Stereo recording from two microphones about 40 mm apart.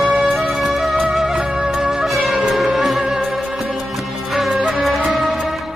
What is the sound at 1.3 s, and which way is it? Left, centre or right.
Wind instrument, centre.